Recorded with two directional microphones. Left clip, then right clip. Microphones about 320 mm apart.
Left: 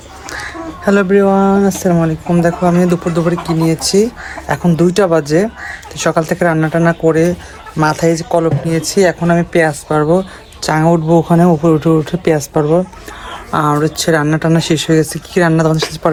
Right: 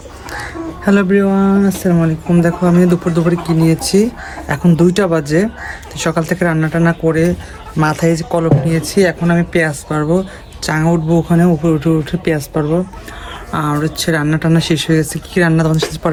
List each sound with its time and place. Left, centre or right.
0.9 s speech: centre